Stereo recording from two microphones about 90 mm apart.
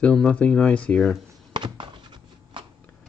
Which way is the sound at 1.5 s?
65° right (ahead or behind).